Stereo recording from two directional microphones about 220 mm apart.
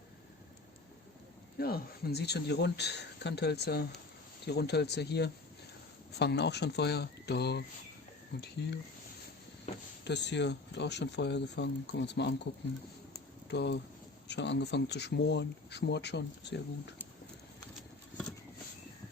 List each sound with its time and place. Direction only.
1.5 s speech: 45° left (ahead or behind)
9.7 s speech: 25° left (ahead or behind)
10.0 s speech: 50° left (ahead or behind)
13.5 s speech: 50° left (ahead or behind)